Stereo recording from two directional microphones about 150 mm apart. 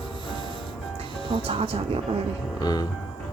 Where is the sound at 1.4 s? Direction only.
40° right (ahead or behind).